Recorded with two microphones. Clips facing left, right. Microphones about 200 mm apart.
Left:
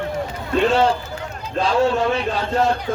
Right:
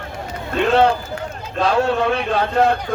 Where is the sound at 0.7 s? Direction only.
60° right (ahead or behind).